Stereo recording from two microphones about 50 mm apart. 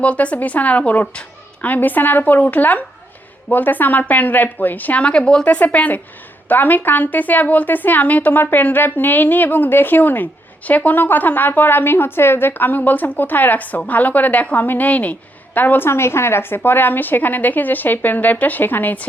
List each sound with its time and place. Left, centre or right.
0.0 s speech: left
5.5 s speech: left
15.9 s speech: left